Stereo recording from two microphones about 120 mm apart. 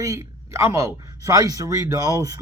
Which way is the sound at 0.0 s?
25° right (ahead or behind).